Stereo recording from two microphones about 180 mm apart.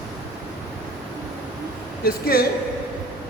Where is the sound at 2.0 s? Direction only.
55° left (ahead or behind).